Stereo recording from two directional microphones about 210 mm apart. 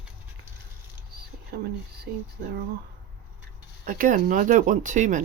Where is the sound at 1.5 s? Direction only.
50° right (ahead or behind).